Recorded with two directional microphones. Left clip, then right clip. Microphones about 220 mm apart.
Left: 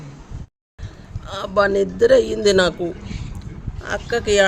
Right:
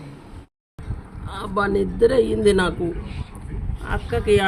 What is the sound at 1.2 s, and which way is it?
A woman's voice, 50° left (ahead or behind).